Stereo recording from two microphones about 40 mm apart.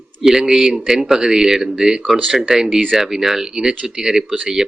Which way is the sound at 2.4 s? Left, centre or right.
Centre.